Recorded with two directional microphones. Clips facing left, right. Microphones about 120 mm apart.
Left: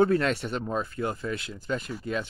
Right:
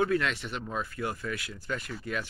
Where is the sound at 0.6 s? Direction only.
25° left (ahead or behind).